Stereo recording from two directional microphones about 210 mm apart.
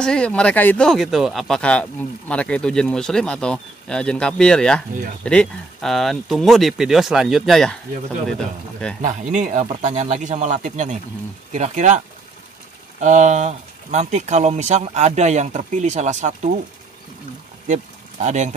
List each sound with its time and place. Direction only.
0.0 s speech: 5° left (ahead or behind)
9.0 s speech: 35° right (ahead or behind)
13.0 s speech: 35° right (ahead or behind)
18.2 s speech: 35° right (ahead or behind)